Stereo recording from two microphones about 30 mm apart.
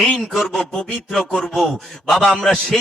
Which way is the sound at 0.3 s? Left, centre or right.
Centre.